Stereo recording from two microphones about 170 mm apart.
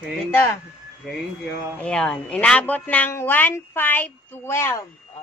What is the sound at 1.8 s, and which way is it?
Speech, 5° left (ahead or behind).